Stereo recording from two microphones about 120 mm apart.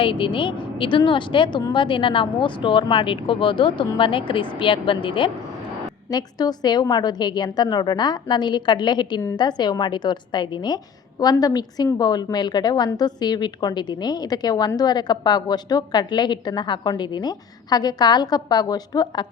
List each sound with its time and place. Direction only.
0.0 s speech: 45° left (ahead or behind)
6.1 s a woman's voice: 35° left (ahead or behind)